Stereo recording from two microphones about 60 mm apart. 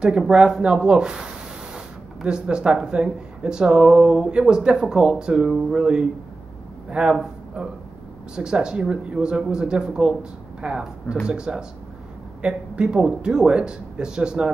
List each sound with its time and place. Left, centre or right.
0.3 s a man's voice: centre